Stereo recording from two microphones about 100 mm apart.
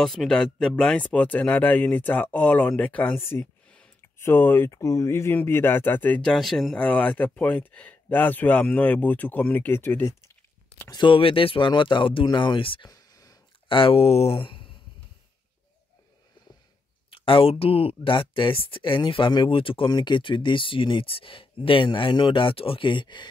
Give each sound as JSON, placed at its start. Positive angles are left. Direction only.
{"t": 0.0, "sound": "speech", "side_deg": 5}
{"t": 3.6, "sound": "a sound", "side_deg": 10}
{"t": 4.2, "sound": "speech", "side_deg": 25}
{"t": 6.3, "sound": "speech", "side_deg": 0}
{"t": 6.8, "sound": "speech", "side_deg": 15}
{"t": 10.9, "sound": "speech", "side_deg": 50}
{"t": 12.8, "sound": "a sound", "side_deg": 40}
{"t": 13.7, "sound": "speech", "side_deg": 60}
{"t": 17.1, "sound": "speech", "side_deg": 60}
{"t": 19.9, "sound": "speech", "side_deg": 50}